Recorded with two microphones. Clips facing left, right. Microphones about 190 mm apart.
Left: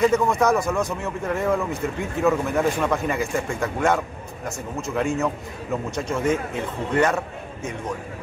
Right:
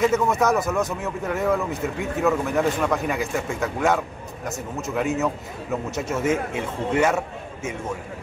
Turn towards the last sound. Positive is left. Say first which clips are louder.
# right 1 dB
turn(degrees=-10)  # may be behind; listen again after turning